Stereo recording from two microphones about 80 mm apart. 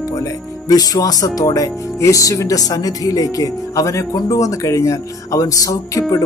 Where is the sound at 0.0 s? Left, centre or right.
Left.